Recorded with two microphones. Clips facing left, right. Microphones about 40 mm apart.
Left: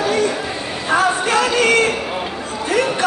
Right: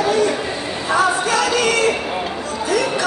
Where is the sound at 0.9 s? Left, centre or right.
Left.